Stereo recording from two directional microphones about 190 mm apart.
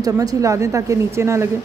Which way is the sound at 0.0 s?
20° right (ahead or behind).